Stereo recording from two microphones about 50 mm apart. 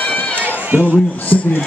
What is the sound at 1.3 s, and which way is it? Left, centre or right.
Speech, left.